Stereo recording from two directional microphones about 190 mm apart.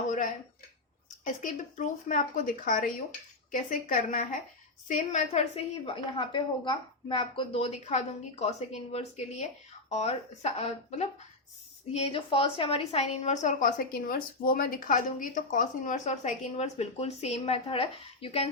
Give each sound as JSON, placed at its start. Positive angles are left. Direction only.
{"t": 1.2, "sound": "a woman's voice", "side_deg": 40}